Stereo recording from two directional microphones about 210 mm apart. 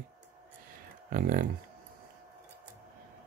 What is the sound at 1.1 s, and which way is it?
Speech, 40° right (ahead or behind).